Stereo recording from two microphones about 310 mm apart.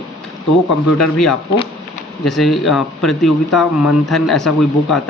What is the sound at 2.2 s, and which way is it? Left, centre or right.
Speech, centre.